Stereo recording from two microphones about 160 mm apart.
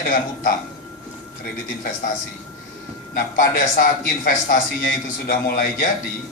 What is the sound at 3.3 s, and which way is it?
A man's voice, 60° left (ahead or behind).